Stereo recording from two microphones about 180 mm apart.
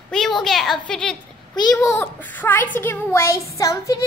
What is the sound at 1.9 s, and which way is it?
A child's voice, 10° left (ahead or behind).